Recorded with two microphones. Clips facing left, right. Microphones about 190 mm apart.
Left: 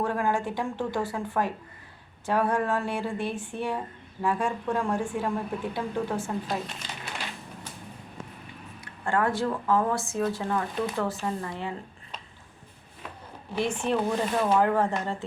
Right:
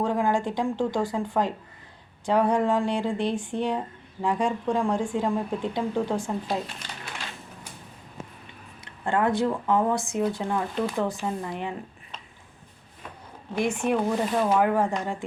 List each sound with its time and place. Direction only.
0.0 s speech: 15° right (ahead or behind)
8.8 s speech: 20° right (ahead or behind)
13.6 s speech: 10° right (ahead or behind)